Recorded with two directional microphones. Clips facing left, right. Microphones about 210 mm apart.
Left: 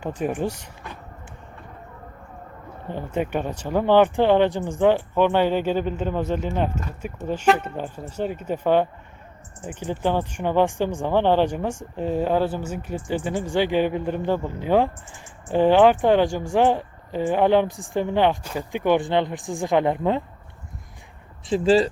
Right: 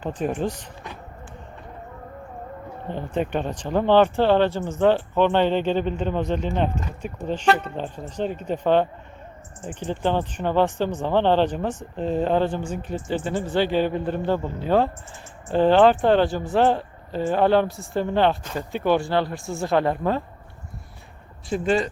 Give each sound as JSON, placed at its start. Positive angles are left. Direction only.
{"t": 0.0, "sound": "speech", "side_deg": 10}
{"t": 2.9, "sound": "speech", "side_deg": 10}
{"t": 21.5, "sound": "speech", "side_deg": 30}